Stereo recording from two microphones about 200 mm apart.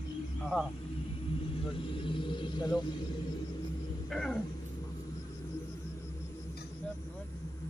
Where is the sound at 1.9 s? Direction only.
25° left (ahead or behind).